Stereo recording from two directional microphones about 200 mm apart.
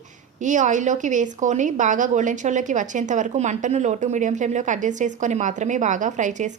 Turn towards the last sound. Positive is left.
turn(degrees=-40)  # may be behind; listen again after turning